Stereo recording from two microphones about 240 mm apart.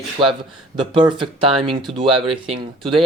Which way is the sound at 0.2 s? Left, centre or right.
Right.